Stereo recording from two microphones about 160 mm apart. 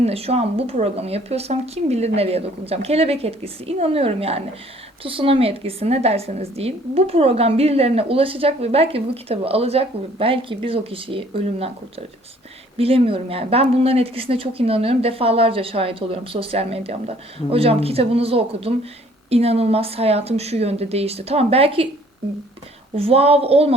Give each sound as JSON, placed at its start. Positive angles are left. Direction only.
{"t": 0.0, "sound": "a woman's voice", "side_deg": -40}
{"t": 23.0, "sound": "a woman's voice", "side_deg": -40}